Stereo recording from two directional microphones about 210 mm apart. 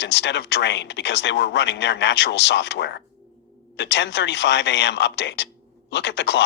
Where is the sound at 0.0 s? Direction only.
55° left (ahead or behind).